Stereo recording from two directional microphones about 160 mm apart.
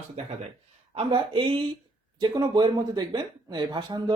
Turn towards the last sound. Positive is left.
turn(degrees=-25)  # may be behind; listen again after turning